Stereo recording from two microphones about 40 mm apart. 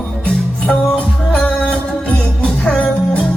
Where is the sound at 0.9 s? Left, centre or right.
Left.